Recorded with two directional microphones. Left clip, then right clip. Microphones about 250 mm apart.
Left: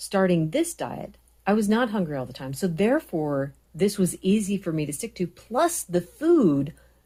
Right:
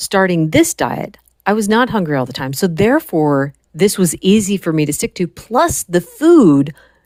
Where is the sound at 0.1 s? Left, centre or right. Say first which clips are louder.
Right 9 dB; right.